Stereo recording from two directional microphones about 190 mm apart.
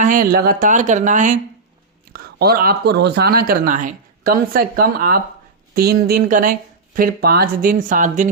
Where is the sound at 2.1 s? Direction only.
55° right (ahead or behind).